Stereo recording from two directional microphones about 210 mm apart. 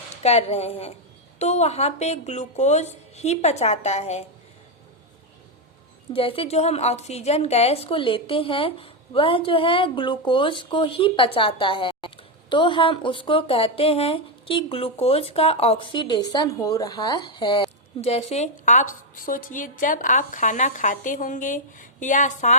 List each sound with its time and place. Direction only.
0.2 s speech: 30° left (ahead or behind)
6.1 s speech: 25° left (ahead or behind)